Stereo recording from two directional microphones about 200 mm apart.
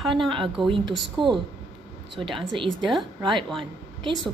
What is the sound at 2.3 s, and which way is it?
Speech, centre (ahead or behind).